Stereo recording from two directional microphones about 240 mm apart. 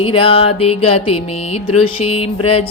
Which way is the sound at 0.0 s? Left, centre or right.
Left.